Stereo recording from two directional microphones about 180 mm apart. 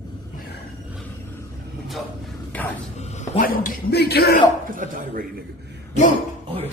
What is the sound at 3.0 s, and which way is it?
A man's voice, 45° left (ahead or behind).